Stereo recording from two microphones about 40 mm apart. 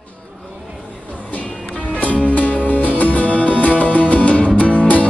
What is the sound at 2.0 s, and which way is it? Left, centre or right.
Music, left.